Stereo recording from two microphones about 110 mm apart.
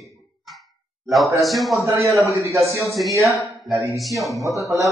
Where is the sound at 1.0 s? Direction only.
Centre (ahead or behind).